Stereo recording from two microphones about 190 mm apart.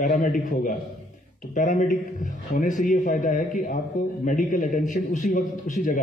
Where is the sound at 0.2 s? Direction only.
45° left (ahead or behind).